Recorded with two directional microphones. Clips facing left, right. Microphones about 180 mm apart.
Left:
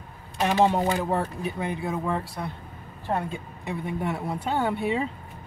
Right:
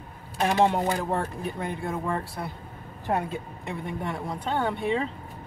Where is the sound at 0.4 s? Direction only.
Centre (ahead or behind).